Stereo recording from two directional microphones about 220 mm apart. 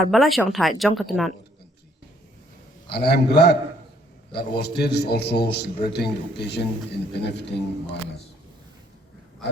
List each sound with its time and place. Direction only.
0.1 s speech: centre (ahead or behind)
2.9 s a man's voice: 50° left (ahead or behind)